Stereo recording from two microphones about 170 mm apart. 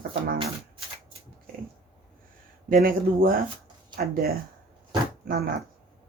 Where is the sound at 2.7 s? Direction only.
55° right (ahead or behind).